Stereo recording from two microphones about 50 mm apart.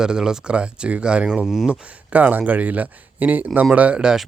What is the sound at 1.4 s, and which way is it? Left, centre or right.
Speech, centre.